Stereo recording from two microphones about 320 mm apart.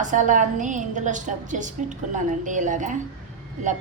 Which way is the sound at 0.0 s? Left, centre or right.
Right.